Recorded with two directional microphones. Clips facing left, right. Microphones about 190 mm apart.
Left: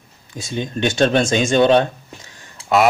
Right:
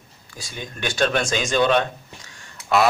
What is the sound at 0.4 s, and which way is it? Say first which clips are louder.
Speech: left 9 dB; 25° left (ahead or behind).